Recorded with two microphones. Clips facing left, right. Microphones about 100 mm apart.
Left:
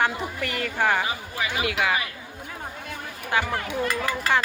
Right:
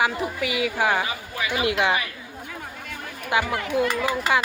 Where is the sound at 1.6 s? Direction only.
25° right (ahead or behind).